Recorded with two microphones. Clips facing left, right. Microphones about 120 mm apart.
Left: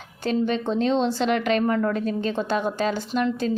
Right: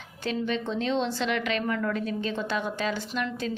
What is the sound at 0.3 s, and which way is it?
Speech, 40° left (ahead or behind).